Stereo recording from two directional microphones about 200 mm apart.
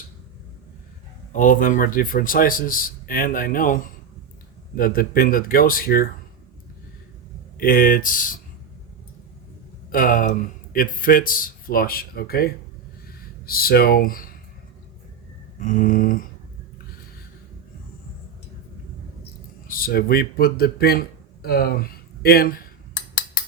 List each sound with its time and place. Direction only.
1.3 s speech: 40° left (ahead or behind)
7.6 s speech: 45° left (ahead or behind)
9.9 s speech: 45° left (ahead or behind)
15.5 s a sound: 40° left (ahead or behind)
19.6 s speech: 45° left (ahead or behind)